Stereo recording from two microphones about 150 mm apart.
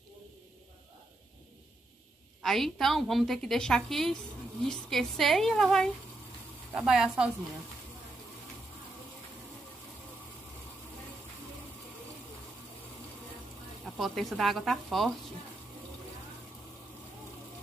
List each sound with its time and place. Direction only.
2.4 s a woman's voice: centre (ahead or behind)
13.8 s a woman's voice: centre (ahead or behind)